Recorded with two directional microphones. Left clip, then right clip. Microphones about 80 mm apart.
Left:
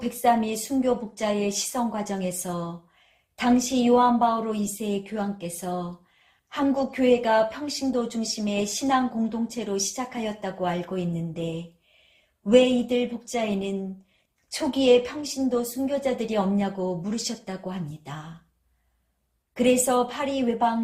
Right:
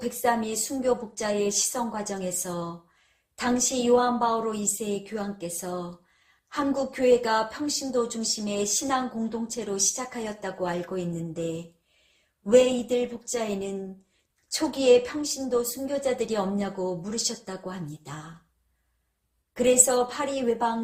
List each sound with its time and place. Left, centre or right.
0.1 s a woman's voice: right
12.5 s a woman's voice: right
19.5 s a woman's voice: right